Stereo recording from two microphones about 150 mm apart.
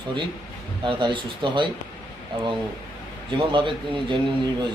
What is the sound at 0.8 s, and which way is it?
Speech, 30° right (ahead or behind).